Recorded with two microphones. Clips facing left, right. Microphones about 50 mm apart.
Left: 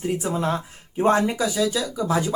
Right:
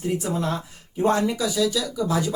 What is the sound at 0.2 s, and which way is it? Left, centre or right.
A man's voice, left.